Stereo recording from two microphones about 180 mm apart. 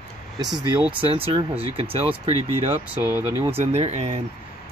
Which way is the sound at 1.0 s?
30° right (ahead or behind).